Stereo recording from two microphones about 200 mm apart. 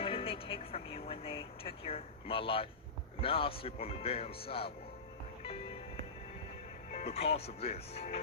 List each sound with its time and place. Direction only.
0.0 s vehicle: 30° left (ahead or behind)
3.2 s speech: 30° left (ahead or behind)
6.9 s speech: 30° left (ahead or behind)